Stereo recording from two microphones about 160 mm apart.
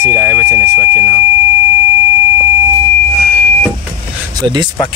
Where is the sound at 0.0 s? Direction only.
10° right (ahead or behind).